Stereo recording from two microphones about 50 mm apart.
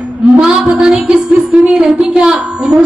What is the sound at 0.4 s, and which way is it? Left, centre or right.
A man's voice, centre.